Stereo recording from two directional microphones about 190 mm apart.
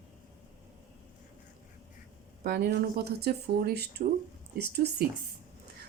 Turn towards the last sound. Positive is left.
turn(degrees=-60)  # may be behind; listen again after turning